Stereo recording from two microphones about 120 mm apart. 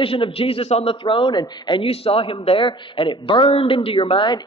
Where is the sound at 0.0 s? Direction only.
50° left (ahead or behind).